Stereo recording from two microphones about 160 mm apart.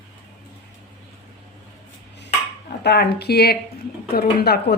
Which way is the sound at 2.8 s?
90° left.